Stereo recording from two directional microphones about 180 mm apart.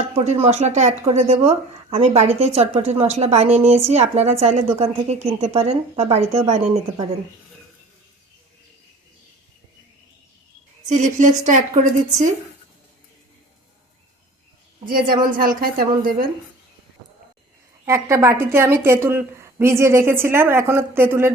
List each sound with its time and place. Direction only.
0.3 s speech: 35° right (ahead or behind)
10.8 s a woman's voice: 40° right (ahead or behind)
14.8 s a woman's voice: 50° right (ahead or behind)
17.8 s a woman's voice: 15° right (ahead or behind)